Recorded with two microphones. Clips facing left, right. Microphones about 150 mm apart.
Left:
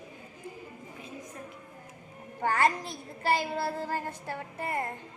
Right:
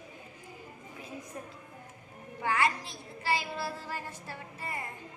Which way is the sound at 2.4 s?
50° left (ahead or behind).